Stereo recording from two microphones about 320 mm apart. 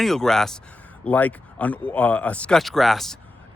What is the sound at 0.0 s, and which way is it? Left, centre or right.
Speech, centre.